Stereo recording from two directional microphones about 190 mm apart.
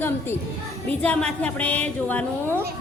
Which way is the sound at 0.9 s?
5° left (ahead or behind).